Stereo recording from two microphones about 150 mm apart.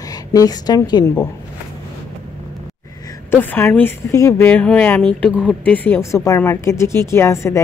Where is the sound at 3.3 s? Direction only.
10° left (ahead or behind).